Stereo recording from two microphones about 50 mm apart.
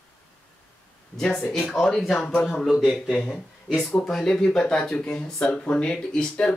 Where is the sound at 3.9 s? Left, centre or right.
Centre.